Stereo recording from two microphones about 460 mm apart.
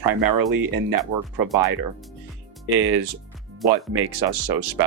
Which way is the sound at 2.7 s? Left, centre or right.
Right.